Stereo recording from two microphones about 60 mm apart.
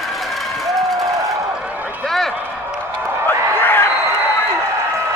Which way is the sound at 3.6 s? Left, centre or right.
Left.